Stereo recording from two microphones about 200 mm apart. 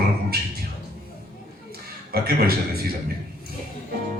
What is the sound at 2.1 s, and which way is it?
Speech, 50° right (ahead or behind).